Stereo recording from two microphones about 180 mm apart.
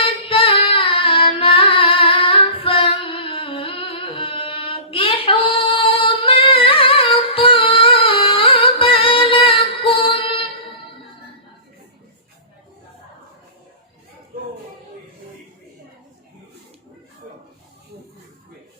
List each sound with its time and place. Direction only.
0.0 s singing: 30° left (ahead or behind)